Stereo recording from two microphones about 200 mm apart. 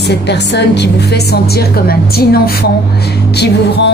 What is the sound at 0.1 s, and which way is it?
A woman's voice, 60° left (ahead or behind).